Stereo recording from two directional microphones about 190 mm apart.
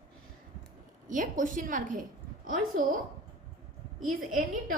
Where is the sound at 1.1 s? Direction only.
45° right (ahead or behind).